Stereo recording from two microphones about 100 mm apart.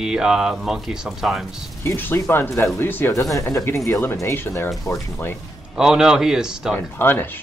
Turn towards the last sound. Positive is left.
turn(degrees=20)  # may be behind; listen again after turning